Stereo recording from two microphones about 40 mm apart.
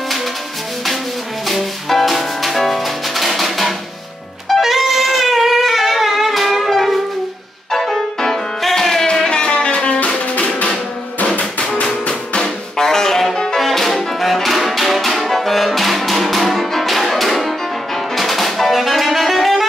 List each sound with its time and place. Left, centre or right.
1.5 s music: centre
8.2 s music: centre
9.3 s music: left
11.6 s music: centre